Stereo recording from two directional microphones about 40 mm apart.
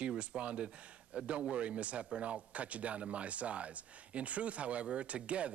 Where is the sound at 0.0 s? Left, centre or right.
Right.